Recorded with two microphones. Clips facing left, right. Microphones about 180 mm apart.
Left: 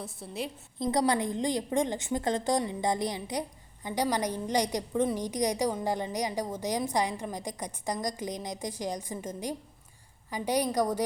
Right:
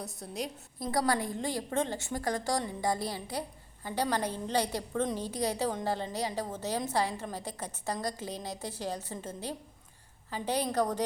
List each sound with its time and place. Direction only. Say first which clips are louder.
0.2 s a woman's voice: left 1 dB; centre (ahead or behind)
0.8 s a woman's voice: left 3 dB; 20° left (ahead or behind)